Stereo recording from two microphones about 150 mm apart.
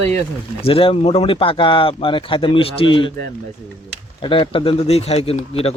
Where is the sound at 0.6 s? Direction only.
40° left (ahead or behind).